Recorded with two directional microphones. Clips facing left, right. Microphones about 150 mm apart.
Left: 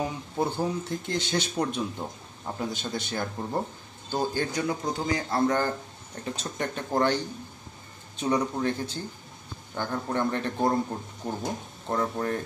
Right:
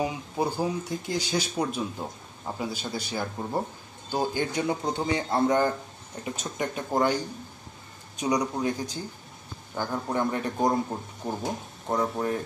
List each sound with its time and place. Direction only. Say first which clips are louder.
0.0 s a man's voice: right 1 dB; 10° right (ahead or behind)